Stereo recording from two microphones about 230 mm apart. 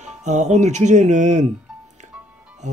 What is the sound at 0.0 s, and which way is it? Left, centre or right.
Speech, right.